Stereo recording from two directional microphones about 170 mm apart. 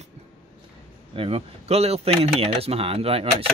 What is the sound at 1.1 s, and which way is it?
Speech, 35° right (ahead or behind).